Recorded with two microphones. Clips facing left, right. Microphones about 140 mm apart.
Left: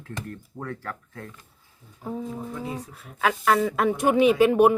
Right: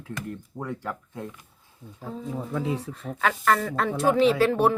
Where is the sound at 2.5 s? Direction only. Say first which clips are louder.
Right 4 dB; 90° right.